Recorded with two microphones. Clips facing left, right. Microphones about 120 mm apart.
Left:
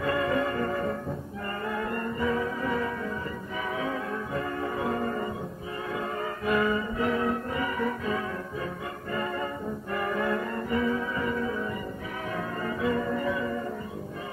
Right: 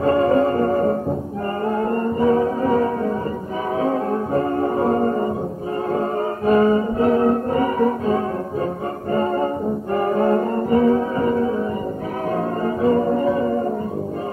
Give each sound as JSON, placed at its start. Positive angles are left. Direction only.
{"t": 0.0, "sound": "music", "side_deg": -40}
{"t": 3.8, "sound": "organ", "side_deg": -40}
{"t": 5.9, "sound": "music", "side_deg": -40}
{"t": 12.6, "sound": "music", "side_deg": -40}